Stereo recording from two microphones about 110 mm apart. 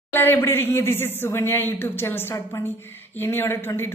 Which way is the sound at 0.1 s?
20° left (ahead or behind).